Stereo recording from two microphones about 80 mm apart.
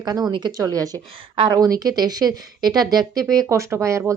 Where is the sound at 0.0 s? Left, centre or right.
Right.